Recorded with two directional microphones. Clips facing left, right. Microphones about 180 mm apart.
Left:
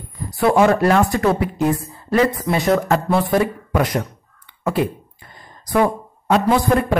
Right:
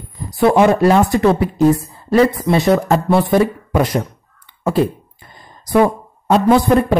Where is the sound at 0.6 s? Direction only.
20° right (ahead or behind).